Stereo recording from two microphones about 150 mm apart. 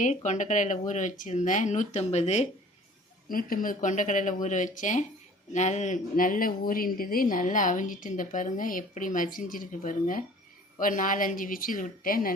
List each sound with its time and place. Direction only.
0.0 s a woman's voice: 55° left (ahead or behind)
3.2 s a woman's voice: 70° left (ahead or behind)